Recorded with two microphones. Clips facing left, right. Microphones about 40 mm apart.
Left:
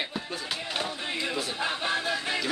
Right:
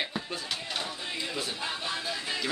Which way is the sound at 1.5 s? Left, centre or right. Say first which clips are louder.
Left 5 dB; left.